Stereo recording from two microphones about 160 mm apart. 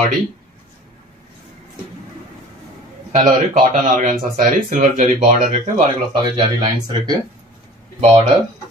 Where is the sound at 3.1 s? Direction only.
50° right (ahead or behind).